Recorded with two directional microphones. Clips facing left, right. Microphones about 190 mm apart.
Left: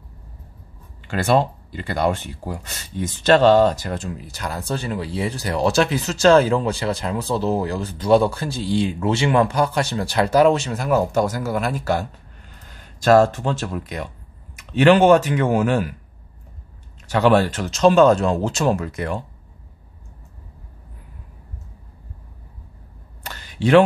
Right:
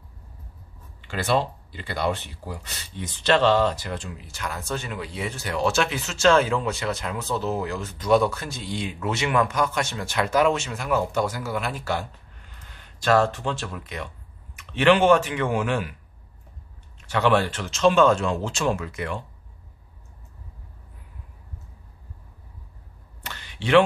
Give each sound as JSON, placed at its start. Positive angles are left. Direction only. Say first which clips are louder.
{"t": 1.0, "sound": "speech", "louder": "left 5 dB", "side_deg": 50}
{"t": 17.1, "sound": "speech", "louder": "left 5 dB", "side_deg": 40}
{"t": 23.2, "sound": "a sound", "louder": "left 9 dB", "side_deg": 40}